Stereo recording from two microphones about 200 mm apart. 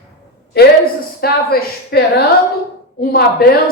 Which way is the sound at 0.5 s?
50° left (ahead or behind).